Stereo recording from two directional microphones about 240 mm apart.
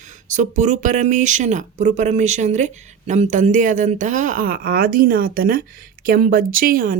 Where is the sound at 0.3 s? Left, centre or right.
Right.